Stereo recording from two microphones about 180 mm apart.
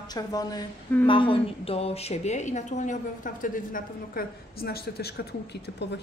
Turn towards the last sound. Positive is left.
turn(degrees=60)  # may be behind; listen again after turning